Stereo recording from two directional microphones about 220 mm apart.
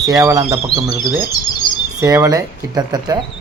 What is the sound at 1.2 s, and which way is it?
Chirp, 20° left (ahead or behind).